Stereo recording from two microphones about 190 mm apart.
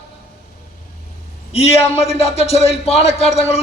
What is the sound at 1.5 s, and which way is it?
A man's voice, 35° left (ahead or behind).